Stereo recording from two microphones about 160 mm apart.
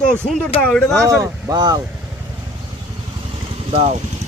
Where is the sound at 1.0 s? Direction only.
20° right (ahead or behind).